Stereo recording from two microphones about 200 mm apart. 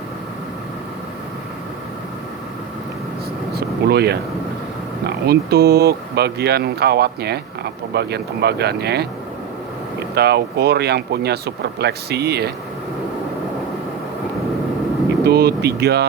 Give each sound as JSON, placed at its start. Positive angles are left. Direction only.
{"t": 3.5, "sound": "air conditioning", "side_deg": -55}
{"t": 5.0, "sound": "speech", "side_deg": -55}
{"t": 10.2, "sound": "speech", "side_deg": -55}
{"t": 15.2, "sound": "speech", "side_deg": -55}